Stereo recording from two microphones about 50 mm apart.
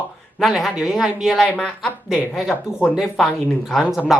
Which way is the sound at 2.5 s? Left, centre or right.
Left.